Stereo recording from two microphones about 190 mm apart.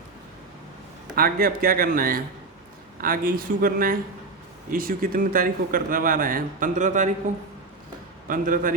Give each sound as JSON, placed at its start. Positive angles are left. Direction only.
{"t": 1.1, "sound": "speech", "side_deg": -50}
{"t": 8.3, "sound": "speech", "side_deg": -45}